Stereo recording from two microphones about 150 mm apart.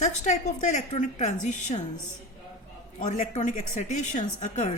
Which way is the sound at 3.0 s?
55° left (ahead or behind).